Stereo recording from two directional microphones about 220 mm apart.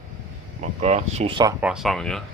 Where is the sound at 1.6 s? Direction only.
Centre (ahead or behind).